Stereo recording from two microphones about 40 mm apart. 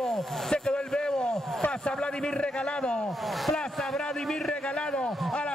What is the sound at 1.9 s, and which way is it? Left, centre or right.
A man's voice, left.